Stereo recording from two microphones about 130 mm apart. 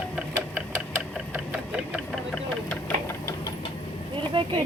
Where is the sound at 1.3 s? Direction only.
10° right (ahead or behind).